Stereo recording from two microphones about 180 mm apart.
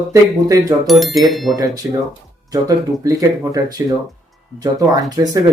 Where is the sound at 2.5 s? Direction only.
20° right (ahead or behind).